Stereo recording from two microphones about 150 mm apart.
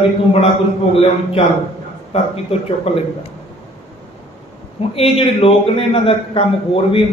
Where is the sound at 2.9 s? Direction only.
45° left (ahead or behind).